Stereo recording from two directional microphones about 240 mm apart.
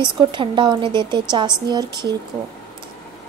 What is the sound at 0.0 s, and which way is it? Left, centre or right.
A woman's voice, centre.